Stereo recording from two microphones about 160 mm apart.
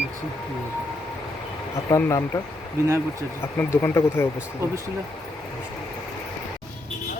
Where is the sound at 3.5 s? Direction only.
15° left (ahead or behind).